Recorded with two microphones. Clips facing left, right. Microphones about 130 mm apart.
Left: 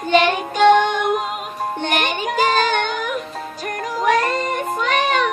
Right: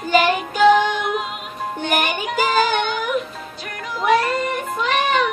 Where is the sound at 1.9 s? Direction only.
5° right (ahead or behind).